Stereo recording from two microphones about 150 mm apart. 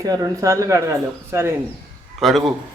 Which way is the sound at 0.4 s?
20° right (ahead or behind).